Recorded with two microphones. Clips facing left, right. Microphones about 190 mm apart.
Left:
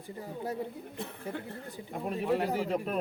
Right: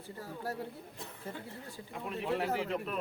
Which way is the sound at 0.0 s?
20° left (ahead or behind).